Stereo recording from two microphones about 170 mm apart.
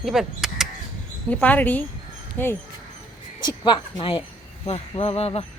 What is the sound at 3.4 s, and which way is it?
Speech, 25° left (ahead or behind).